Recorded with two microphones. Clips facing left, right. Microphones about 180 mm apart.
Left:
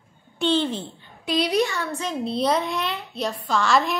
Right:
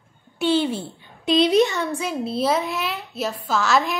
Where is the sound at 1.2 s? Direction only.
25° right (ahead or behind).